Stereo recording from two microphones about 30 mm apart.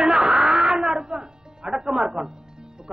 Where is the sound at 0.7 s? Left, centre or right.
Right.